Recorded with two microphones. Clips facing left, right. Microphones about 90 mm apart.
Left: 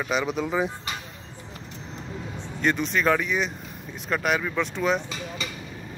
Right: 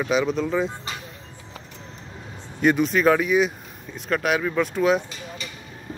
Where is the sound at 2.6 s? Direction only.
5° right (ahead or behind).